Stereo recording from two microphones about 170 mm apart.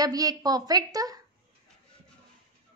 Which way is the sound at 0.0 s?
20° right (ahead or behind).